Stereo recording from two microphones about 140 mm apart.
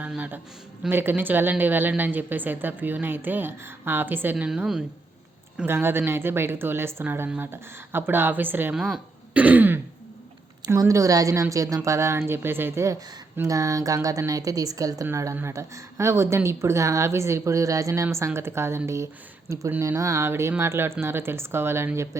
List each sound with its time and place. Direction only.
0.0 s a woman's voice: 10° right (ahead or behind)
5.5 s a woman's voice: 15° right (ahead or behind)
8.7 s a woman's voice: centre (ahead or behind); by 22.2 s 20° right (ahead or behind)